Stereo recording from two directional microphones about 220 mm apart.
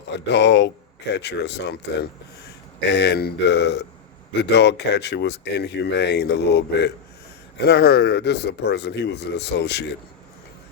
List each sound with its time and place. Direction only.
0.1 s speech: 50° left (ahead or behind)